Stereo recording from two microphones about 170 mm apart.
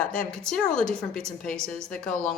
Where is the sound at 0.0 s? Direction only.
5° left (ahead or behind).